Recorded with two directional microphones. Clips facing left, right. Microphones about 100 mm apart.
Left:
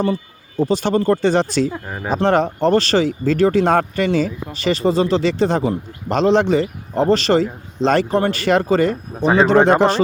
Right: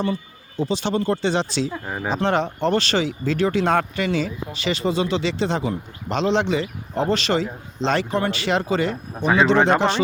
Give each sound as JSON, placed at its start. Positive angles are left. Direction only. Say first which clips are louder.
{"t": 0.0, "sound": "speech", "louder": "left 5 dB", "side_deg": 40}
{"t": 1.8, "sound": "speech", "louder": "even", "side_deg": -5}
{"t": 2.1, "sound": "speech", "louder": "left 6 dB", "side_deg": 40}
{"t": 9.2, "sound": "speech", "louder": "left 4 dB", "side_deg": 35}